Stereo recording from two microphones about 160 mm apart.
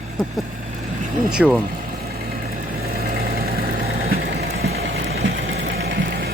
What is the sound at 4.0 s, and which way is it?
Vehicle, 70° right (ahead or behind).